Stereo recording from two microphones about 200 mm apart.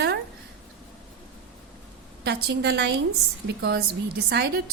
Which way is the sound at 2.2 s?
55° right (ahead or behind).